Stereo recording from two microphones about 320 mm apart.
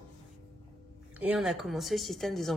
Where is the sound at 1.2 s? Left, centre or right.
Centre.